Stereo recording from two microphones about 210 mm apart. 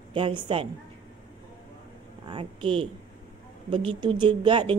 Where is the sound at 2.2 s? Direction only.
25° right (ahead or behind).